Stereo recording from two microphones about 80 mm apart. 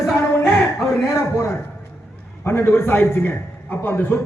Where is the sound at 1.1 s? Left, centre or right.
Left.